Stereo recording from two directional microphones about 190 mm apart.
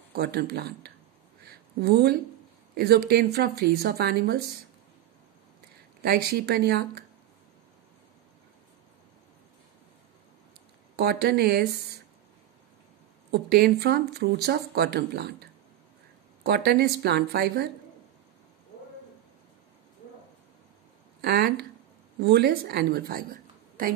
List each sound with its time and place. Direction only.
0.1 s speech: 55° right (ahead or behind)
1.5 s a sound: 55° right (ahead or behind)
2.7 s a woman's voice: 55° right (ahead or behind)
6.0 s speech: 55° right (ahead or behind)
11.0 s speech: 55° right (ahead or behind)
13.3 s speech: 55° right (ahead or behind)
16.4 s speech: 55° right (ahead or behind)
21.2 s speech: 55° right (ahead or behind)